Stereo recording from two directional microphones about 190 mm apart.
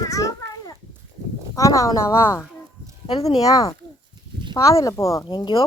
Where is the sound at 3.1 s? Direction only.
30° left (ahead or behind).